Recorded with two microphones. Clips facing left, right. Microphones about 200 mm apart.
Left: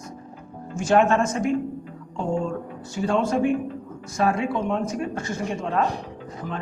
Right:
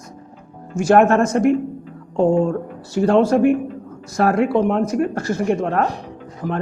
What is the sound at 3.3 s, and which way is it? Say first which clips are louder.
A woman's voice: right 6 dB; 60° right (ahead or behind).